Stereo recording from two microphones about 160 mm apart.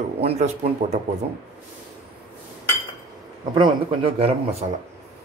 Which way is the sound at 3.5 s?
30° right (ahead or behind).